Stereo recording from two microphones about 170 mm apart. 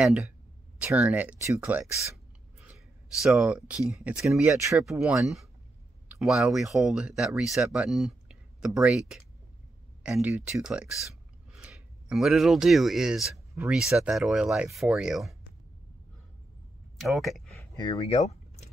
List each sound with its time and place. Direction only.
0.0 s speech: 5° right (ahead or behind)
3.2 s speech: centre (ahead or behind)
17.0 s speech: centre (ahead or behind)
17.7 s speech: 20° left (ahead or behind)
18.2 s a sound: 40° left (ahead or behind)